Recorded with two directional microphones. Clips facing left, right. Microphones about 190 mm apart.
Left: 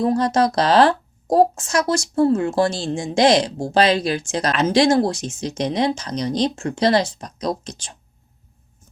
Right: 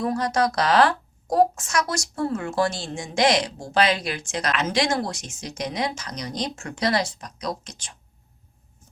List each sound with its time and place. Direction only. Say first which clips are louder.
0.0 s a woman's voice: left 5 dB; 25° left (ahead or behind)